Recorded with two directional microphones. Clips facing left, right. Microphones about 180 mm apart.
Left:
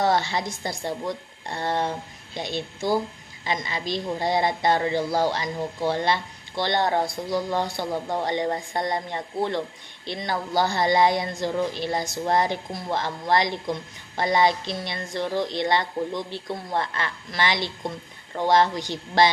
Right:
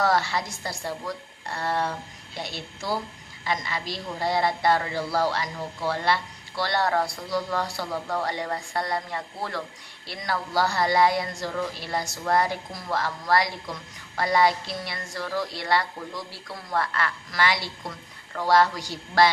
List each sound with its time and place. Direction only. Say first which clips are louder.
0.0 s speech: left 1 dB; 20° left (ahead or behind)